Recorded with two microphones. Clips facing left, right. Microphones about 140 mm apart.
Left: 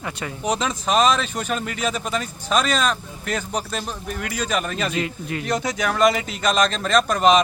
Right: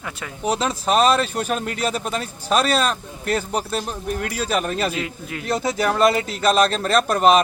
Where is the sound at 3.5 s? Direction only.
5° right (ahead or behind).